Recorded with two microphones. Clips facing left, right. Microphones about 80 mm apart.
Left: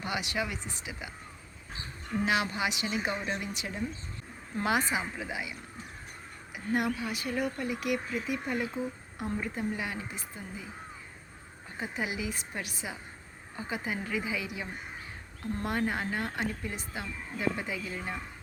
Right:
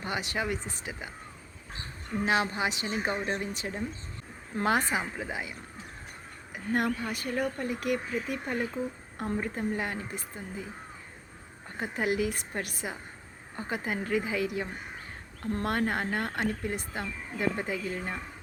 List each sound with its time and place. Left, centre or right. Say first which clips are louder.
0.0 s a woman's voice: right 1 dB; right
2.2 s a woman's voice: right 2 dB; right
11.8 s speech: right 6 dB; right